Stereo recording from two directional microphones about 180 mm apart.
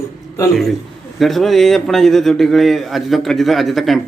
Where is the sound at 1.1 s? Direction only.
Centre (ahead or behind).